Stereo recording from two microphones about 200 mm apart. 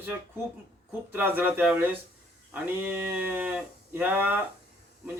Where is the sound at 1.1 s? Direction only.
10° right (ahead or behind).